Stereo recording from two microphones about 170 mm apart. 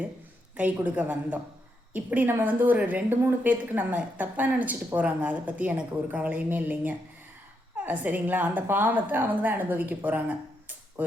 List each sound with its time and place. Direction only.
0.5 s a woman's voice: 10° right (ahead or behind)